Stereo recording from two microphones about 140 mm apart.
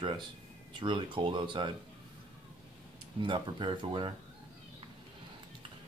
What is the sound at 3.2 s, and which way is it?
Speech, 35° right (ahead or behind).